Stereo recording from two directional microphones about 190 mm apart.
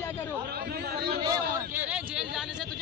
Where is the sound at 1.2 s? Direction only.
20° right (ahead or behind).